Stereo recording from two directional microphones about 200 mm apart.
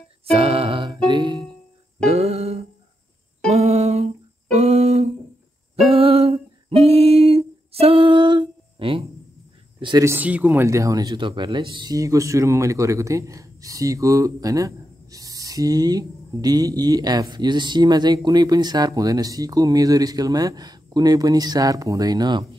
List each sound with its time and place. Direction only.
0.3 s music: 30° right (ahead or behind)
3.4 s humming: 35° right (ahead or behind)
5.9 s a sound: 30° right (ahead or behind)
9.8 s speech: 20° right (ahead or behind)